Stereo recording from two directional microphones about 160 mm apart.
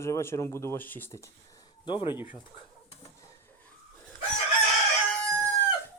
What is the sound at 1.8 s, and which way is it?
Speech, 30° left (ahead or behind).